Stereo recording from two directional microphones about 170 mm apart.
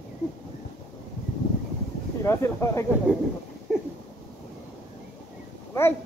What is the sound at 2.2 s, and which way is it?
Speech, 15° left (ahead or behind).